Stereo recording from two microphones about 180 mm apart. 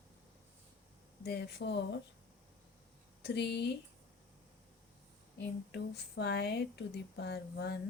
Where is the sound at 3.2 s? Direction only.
65° left (ahead or behind).